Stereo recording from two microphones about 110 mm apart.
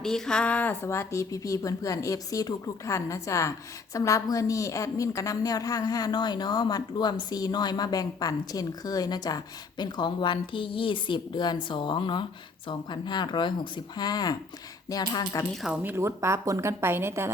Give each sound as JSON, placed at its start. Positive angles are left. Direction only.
{"t": 0.0, "sound": "speech", "side_deg": 5}
{"t": 0.9, "sound": "a woman's voice", "side_deg": 30}
{"t": 15.8, "sound": "speech", "side_deg": -20}